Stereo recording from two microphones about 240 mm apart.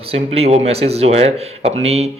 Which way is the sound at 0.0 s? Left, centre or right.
Right.